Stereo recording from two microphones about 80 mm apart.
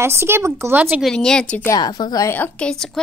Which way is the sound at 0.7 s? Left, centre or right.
Centre.